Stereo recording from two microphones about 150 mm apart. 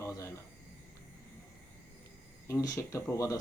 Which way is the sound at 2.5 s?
20° left (ahead or behind).